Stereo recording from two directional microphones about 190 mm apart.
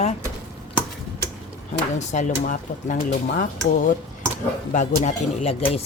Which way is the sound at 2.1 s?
40° left (ahead or behind).